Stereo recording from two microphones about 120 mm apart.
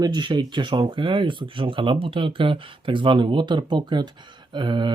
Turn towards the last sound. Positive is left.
turn(degrees=-40)  # may be behind; listen again after turning